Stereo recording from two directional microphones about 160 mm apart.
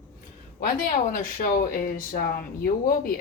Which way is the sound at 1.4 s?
60° left (ahead or behind).